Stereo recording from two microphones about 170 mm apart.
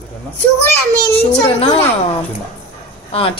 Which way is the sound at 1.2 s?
30° left (ahead or behind).